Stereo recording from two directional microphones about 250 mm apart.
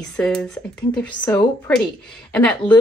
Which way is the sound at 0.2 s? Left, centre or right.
Centre.